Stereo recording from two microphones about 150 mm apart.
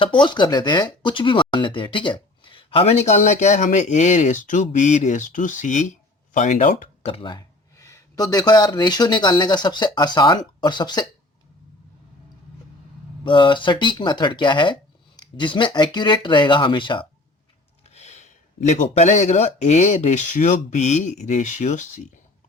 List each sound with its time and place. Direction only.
0.0 s speech: 30° left (ahead or behind); by 6.7 s 55° left (ahead or behind)
7.0 s speech: 35° left (ahead or behind)
13.2 s speech: 30° left (ahead or behind)
17.8 s speech: 45° left (ahead or behind)